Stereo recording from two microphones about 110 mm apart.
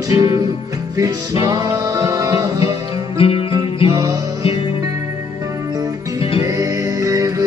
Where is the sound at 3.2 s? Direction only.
60° left (ahead or behind).